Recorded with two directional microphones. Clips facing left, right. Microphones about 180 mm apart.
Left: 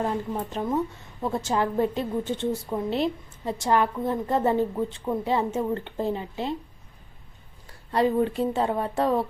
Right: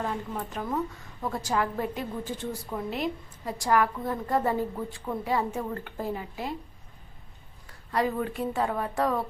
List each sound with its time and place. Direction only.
0.0 s a woman's voice: 30° left (ahead or behind)
7.7 s a woman's voice: 30° left (ahead or behind)